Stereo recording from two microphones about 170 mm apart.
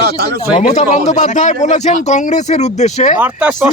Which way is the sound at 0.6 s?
45° left (ahead or behind).